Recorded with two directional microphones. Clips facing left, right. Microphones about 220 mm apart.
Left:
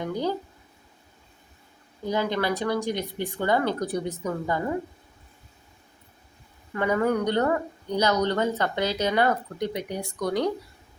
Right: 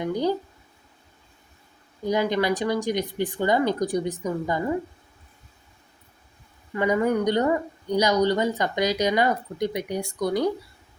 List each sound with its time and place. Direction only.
0.0 s speech: 15° right (ahead or behind)
2.0 s speech: 15° right (ahead or behind)
6.7 s speech: 15° right (ahead or behind)